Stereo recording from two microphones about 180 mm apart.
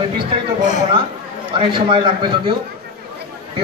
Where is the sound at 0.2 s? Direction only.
25° right (ahead or behind).